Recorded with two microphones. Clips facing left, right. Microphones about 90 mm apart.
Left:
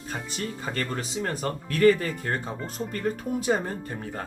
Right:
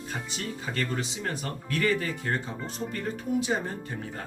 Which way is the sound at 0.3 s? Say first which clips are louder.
Left 1 dB; 40° left (ahead or behind).